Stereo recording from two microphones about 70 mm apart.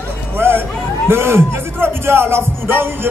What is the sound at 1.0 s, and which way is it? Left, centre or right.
Speech, right.